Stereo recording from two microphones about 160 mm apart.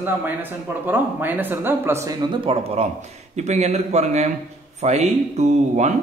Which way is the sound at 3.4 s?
45° right (ahead or behind).